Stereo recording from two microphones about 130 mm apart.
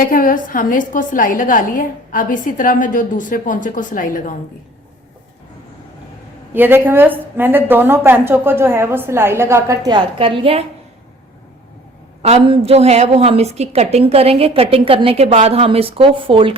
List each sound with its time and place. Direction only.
0.1 s a woman's voice: 90° left
6.5 s a woman's voice: 15° right (ahead or behind)
9.9 s a woman's voice: 45° right (ahead or behind)
12.5 s a woman's voice: 50° right (ahead or behind)